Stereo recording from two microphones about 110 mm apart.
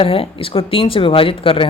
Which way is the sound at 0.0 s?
60° left (ahead or behind).